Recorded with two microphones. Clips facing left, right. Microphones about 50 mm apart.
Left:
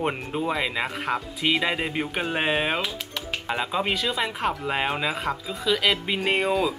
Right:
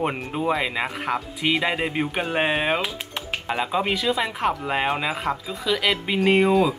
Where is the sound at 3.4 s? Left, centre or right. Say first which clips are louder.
Right 2 dB; centre.